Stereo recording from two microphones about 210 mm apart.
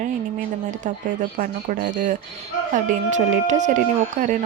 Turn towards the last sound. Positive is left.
turn(degrees=-40)  # may be behind; listen again after turning